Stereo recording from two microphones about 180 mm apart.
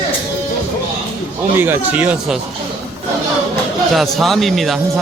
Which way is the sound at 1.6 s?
10° right (ahead or behind).